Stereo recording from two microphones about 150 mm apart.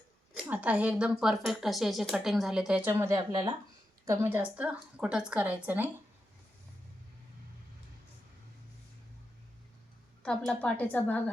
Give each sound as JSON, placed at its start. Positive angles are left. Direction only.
{"t": 0.3, "sound": "speech", "side_deg": -10}
{"t": 2.9, "sound": "a woman's voice", "side_deg": -20}
{"t": 10.2, "sound": "speech", "side_deg": 10}